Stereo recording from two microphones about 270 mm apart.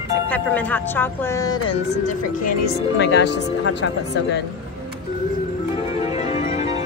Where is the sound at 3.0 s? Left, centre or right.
Left.